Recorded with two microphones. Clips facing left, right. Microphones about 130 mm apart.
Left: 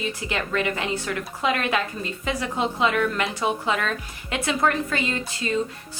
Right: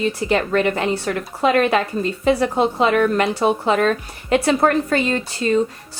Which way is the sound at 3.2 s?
35° right (ahead or behind).